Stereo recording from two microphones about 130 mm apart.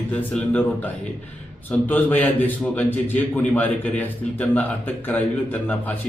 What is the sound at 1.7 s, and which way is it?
A man's voice, 15° left (ahead or behind).